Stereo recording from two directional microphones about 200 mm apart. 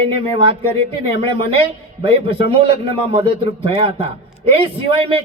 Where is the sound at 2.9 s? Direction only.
25° right (ahead or behind).